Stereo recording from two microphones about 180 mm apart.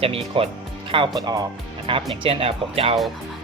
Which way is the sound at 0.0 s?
35° right (ahead or behind).